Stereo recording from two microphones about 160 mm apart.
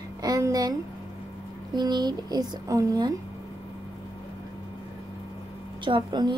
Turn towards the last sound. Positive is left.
turn(degrees=-30)  # may be behind; listen again after turning